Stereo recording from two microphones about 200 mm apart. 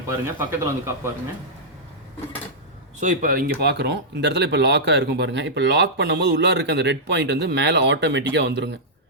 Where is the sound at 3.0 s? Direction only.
40° right (ahead or behind).